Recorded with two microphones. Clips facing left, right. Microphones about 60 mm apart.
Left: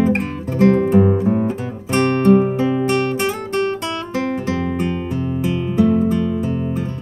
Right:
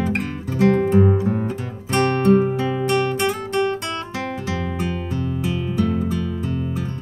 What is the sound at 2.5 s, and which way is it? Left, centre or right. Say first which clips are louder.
Music: left 3 dB; centre.